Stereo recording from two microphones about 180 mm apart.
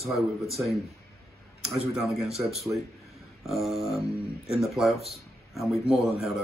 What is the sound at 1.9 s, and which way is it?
Speech, centre (ahead or behind).